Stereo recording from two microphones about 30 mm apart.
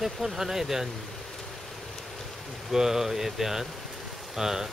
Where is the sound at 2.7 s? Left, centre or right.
Centre.